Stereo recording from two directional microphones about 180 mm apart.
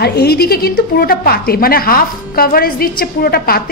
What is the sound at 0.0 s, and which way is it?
A woman's voice, 65° left (ahead or behind).